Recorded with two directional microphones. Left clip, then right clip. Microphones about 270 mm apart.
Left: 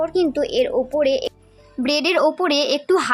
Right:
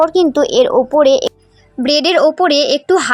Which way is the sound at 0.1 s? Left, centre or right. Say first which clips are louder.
Right 8 dB; centre.